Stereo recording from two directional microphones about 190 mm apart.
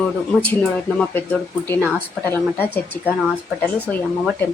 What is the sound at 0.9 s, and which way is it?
A woman's voice, 10° left (ahead or behind).